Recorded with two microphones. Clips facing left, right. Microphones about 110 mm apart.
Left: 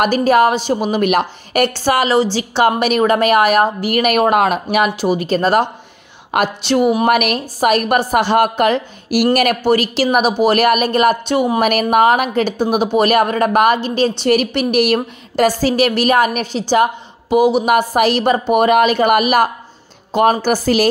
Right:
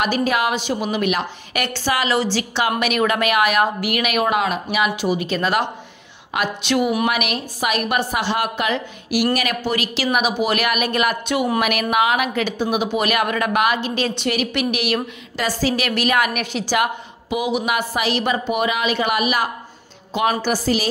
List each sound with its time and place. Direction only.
0.0 s a woman's voice: 45° left (ahead or behind)
0.9 s a woman's voice: 50° left (ahead or behind); by 7.1 s 30° left (ahead or behind)
7.1 s a woman's voice: 50° left (ahead or behind)
17.6 s a woman's voice: 50° left (ahead or behind)